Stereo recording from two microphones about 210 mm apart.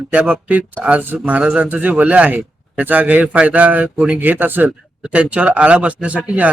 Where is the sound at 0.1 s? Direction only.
5° right (ahead or behind).